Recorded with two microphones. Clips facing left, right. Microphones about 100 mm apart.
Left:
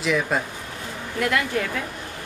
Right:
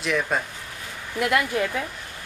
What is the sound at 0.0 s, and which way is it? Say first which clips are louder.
Speech: left 2 dB; centre (ahead or behind).